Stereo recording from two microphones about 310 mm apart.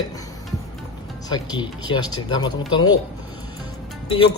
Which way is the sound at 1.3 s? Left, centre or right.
Centre.